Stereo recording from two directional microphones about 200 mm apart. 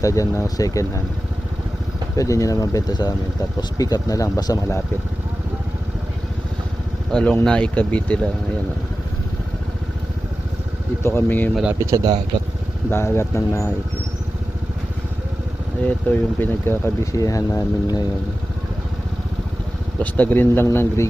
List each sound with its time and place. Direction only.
0.0 s speech: 15° left (ahead or behind)
2.1 s speech: 15° left (ahead or behind)
7.1 s speech: 5° left (ahead or behind)
11.0 s speech: 10° left (ahead or behind)
11.6 s a man's voice: 10° right (ahead or behind)
12.9 s speech: 15° left (ahead or behind)
16.4 s speech: 10° left (ahead or behind)
20.0 s speech: 10° left (ahead or behind)